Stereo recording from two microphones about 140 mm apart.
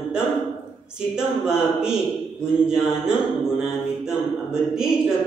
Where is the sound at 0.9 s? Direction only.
5° right (ahead or behind).